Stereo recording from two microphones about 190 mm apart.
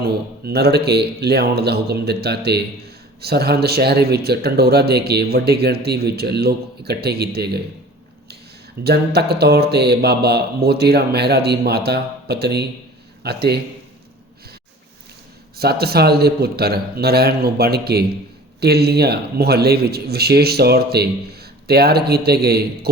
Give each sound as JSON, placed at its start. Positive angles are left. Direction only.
{"t": 0.0, "sound": "speech", "side_deg": -55}
{"t": 8.8, "sound": "speech", "side_deg": -60}
{"t": 15.5, "sound": "speech", "side_deg": -55}